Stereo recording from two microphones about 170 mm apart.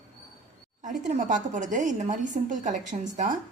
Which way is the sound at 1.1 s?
45° right (ahead or behind).